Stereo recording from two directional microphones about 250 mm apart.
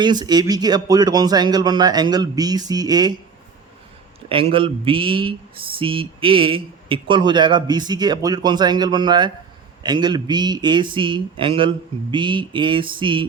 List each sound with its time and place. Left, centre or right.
0.0 s speech: centre
4.3 s speech: right
12.1 s mantra: centre